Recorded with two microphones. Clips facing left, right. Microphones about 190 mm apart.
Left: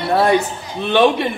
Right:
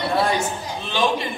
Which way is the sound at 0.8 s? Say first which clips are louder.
Left 9 dB; 60° left (ahead or behind).